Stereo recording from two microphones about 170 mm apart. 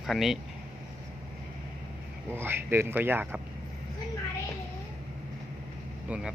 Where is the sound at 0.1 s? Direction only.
Centre (ahead or behind).